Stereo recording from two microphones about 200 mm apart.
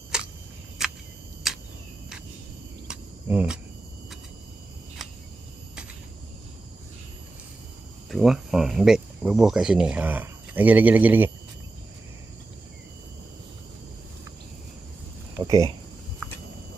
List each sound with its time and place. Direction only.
0.1 s a sound: 5° right (ahead or behind)
0.8 s cricket: centre (ahead or behind)
2.8 s cricket: 5° right (ahead or behind)
8.1 s speech: centre (ahead or behind)
15.4 s speech: 15° right (ahead or behind)
16.2 s a sound: 5° left (ahead or behind)